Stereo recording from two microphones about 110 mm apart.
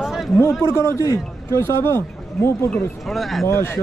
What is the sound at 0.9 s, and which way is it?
Speech, 30° left (ahead or behind).